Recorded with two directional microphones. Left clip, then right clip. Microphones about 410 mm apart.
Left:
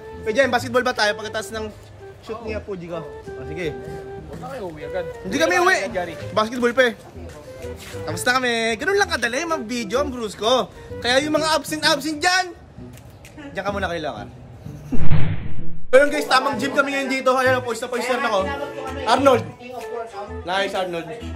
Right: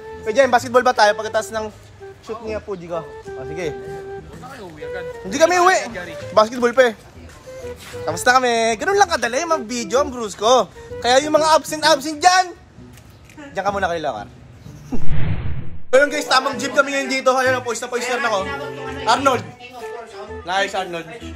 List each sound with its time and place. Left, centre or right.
0.2 s speech: centre
4.5 s speech: centre
5.0 s speech: centre
13.6 s speech: centre
14.9 s a sound: centre
15.9 s speech: centre
20.4 s speech: centre